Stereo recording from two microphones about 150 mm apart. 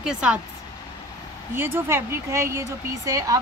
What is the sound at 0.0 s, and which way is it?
Speech, 5° right (ahead or behind).